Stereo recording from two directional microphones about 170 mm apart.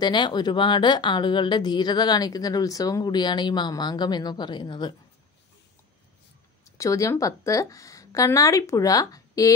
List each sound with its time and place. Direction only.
0.0 s speech: 25° left (ahead or behind)
6.6 s speech: 20° left (ahead or behind)